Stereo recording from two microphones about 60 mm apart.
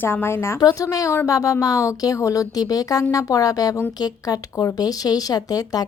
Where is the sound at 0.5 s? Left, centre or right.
Left.